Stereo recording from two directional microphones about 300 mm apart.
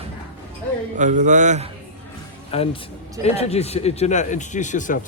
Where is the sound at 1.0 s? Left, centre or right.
Right.